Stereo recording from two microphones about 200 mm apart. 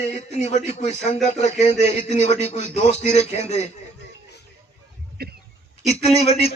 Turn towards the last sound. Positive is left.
turn(degrees=30)  # may be behind; listen again after turning